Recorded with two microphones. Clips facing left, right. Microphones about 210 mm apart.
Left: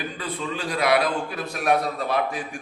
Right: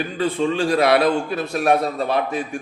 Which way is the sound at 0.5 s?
30° right (ahead or behind).